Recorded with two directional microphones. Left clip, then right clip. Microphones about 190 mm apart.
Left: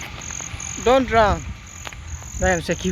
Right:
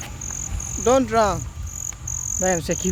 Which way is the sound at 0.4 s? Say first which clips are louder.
Even; 55° right (ahead or behind).